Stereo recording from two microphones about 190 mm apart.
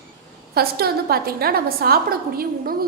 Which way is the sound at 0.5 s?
55° right (ahead or behind).